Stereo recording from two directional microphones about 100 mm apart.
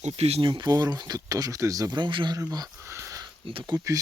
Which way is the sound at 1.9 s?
55° right (ahead or behind).